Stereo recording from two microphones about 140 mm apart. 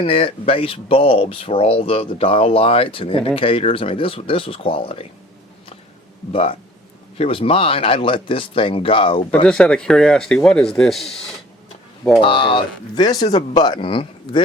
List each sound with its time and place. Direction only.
0.0 s speech: 40° left (ahead or behind)
6.3 s speech: 45° left (ahead or behind)
9.5 s speech: 5° left (ahead or behind)
12.2 s speech: 40° left (ahead or behind)